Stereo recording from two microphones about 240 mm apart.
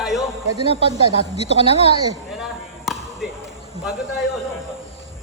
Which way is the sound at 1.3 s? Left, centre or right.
Left.